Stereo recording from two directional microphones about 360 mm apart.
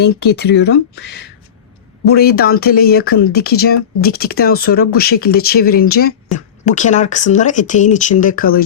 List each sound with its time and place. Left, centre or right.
0.3 s speech: left